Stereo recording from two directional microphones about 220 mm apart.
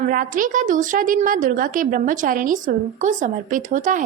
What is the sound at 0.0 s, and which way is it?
A woman's voice, 40° right (ahead or behind).